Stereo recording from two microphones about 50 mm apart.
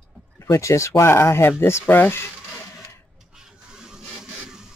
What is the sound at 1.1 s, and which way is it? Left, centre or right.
Speech, left.